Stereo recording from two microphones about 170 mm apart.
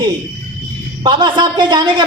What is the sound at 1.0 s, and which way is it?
A woman's voice, 25° right (ahead or behind).